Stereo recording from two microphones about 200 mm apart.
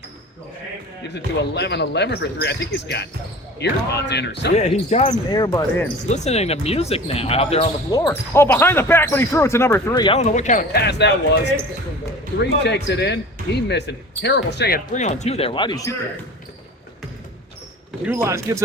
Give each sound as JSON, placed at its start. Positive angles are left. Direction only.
{"t": 1.0, "sound": "speech", "side_deg": 60}
{"t": 4.5, "sound": "speech", "side_deg": 35}
{"t": 5.1, "sound": "speech", "side_deg": 20}
{"t": 6.1, "sound": "speech", "side_deg": 35}
{"t": 7.9, "sound": "speech", "side_deg": 15}
{"t": 10.2, "sound": "speech", "side_deg": 35}
{"t": 12.6, "sound": "speech", "side_deg": 55}
{"t": 14.9, "sound": "speech", "side_deg": 35}
{"t": 18.0, "sound": "speech", "side_deg": -10}